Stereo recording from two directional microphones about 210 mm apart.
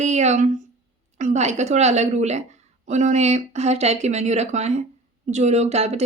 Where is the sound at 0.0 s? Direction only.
35° right (ahead or behind).